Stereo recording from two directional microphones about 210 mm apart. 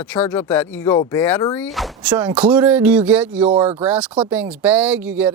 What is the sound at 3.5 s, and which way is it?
Speech, 25° right (ahead or behind).